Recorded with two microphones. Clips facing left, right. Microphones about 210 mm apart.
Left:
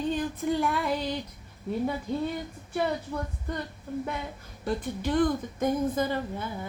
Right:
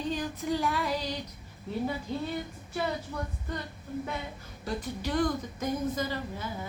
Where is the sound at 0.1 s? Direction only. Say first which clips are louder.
Left 3 dB; 55° left (ahead or behind).